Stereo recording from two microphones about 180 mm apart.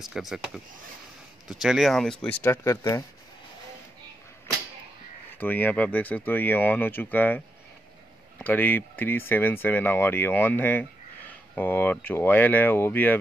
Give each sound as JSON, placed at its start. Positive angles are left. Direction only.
{"t": 0.0, "sound": "speech", "side_deg": 0}
{"t": 5.4, "sound": "speech", "side_deg": 10}